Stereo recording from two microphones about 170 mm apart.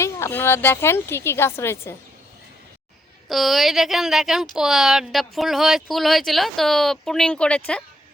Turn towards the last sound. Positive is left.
turn(degrees=5)  # may be behind; listen again after turning